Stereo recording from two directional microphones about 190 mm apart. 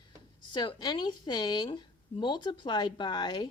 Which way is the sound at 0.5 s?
20° left (ahead or behind).